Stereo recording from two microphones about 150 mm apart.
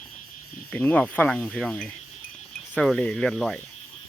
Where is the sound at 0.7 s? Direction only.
10° left (ahead or behind).